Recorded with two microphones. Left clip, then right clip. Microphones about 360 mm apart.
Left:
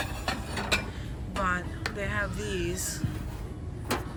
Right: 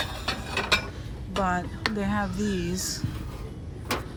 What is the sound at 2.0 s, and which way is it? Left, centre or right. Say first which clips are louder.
Speech: right 2 dB; centre.